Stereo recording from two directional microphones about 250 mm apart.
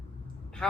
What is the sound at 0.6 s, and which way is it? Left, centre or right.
Speech, centre.